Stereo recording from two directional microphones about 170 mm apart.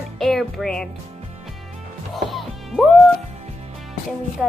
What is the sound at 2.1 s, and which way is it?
Music, centre (ahead or behind).